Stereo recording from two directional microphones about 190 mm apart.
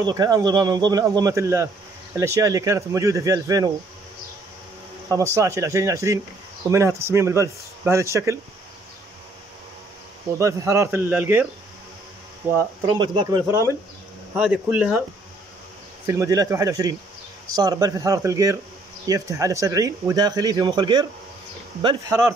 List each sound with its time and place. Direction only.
0.0 s a man's voice: 20° right (ahead or behind)
5.1 s speech: 15° right (ahead or behind)
10.4 s speech: 15° right (ahead or behind)
12.4 s speech: 20° right (ahead or behind)
14.3 s speech: 5° right (ahead or behind)
16.1 s speech: 15° right (ahead or behind)